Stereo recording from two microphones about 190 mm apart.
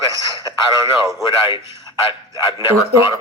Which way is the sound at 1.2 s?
25° left (ahead or behind).